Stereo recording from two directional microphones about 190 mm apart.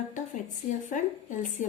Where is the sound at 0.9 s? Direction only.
40° left (ahead or behind).